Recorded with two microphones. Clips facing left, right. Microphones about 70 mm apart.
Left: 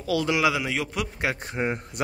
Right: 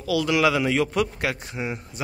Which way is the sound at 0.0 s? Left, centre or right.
Left.